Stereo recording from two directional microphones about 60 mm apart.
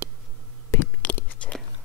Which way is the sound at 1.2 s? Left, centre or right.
Left.